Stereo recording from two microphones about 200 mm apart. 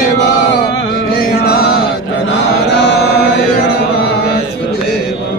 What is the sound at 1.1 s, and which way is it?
Music, 50° left (ahead or behind).